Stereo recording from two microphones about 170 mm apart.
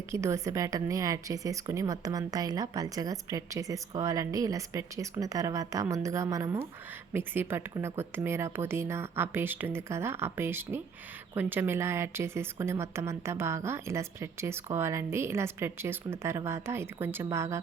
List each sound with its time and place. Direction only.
0.1 s a woman's voice: 15° right (ahead or behind)